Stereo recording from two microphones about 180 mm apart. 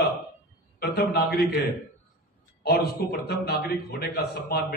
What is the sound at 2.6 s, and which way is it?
A man's voice, 60° left (ahead or behind).